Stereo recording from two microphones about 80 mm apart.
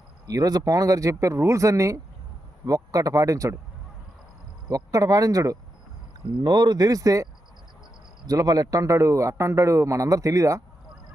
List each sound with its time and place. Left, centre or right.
0.3 s speech: right
4.7 s speech: right
6.4 s speech: right
8.3 s speech: right